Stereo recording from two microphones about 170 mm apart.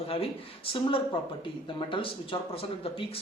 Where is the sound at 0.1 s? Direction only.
35° left (ahead or behind).